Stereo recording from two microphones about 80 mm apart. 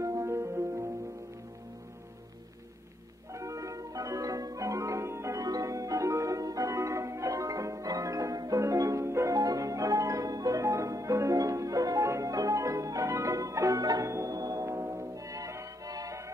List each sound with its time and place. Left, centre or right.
0.0 s music: right
3.3 s music: right
9.3 s music: right